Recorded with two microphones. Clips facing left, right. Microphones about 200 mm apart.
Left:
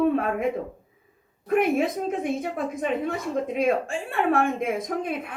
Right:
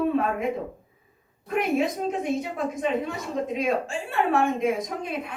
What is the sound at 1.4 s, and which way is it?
A woman's voice, 55° left (ahead or behind).